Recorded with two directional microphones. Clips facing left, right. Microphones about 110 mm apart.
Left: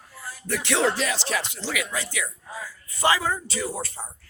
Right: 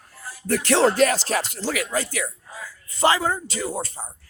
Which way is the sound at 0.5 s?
40° right (ahead or behind).